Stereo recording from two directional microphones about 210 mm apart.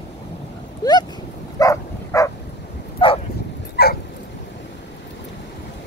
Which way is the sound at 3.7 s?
50° left (ahead or behind).